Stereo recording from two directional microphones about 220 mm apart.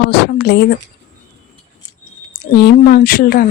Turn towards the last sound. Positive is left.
turn(degrees=40)  # may be behind; listen again after turning